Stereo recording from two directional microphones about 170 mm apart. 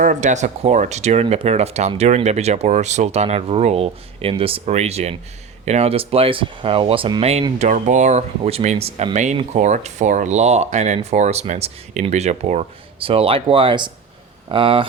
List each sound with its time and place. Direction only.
0.0 s speech: 45° right (ahead or behind); by 14.8 s 30° right (ahead or behind)